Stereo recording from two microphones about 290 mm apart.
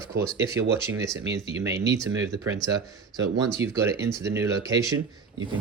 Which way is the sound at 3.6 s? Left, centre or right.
Centre.